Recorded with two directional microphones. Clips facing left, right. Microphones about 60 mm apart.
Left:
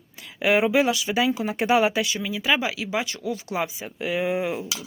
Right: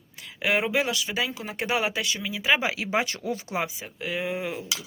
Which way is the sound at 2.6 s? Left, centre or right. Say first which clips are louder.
Even; right.